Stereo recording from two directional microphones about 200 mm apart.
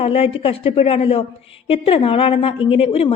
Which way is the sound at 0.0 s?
30° left (ahead or behind).